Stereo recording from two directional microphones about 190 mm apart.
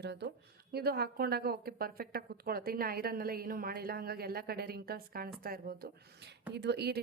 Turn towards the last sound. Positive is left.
turn(degrees=-60)  # may be behind; listen again after turning